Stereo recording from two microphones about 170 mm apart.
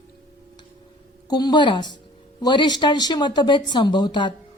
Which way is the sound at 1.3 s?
25° left (ahead or behind).